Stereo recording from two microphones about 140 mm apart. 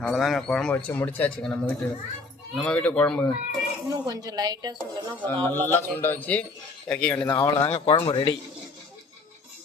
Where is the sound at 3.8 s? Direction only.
25° right (ahead or behind).